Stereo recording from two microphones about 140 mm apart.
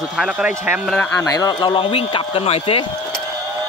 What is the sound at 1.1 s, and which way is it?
Speech, 25° left (ahead or behind).